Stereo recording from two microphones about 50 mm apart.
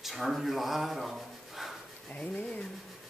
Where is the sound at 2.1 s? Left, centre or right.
Left.